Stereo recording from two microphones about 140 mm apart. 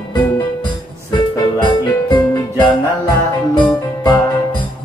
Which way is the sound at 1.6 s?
35° left (ahead or behind).